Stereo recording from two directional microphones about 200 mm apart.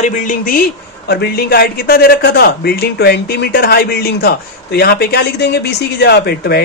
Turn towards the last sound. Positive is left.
turn(degrees=55)  # may be behind; listen again after turning